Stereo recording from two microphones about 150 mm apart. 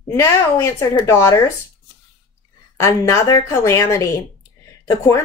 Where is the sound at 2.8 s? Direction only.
20° left (ahead or behind).